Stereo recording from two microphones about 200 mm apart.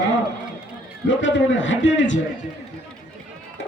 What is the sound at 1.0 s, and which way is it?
A man's voice, 70° left (ahead or behind).